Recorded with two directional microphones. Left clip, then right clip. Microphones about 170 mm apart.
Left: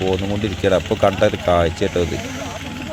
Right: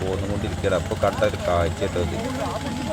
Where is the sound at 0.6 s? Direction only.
30° left (ahead or behind).